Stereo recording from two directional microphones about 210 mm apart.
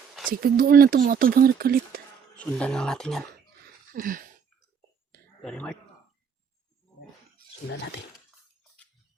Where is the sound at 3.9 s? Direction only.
40° right (ahead or behind).